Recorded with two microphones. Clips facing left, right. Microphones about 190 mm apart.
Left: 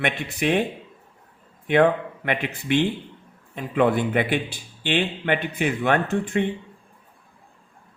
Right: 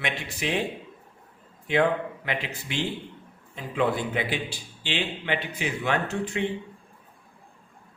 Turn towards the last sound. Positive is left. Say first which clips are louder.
# left 5 dB
turn(degrees=55)  # may be behind; listen again after turning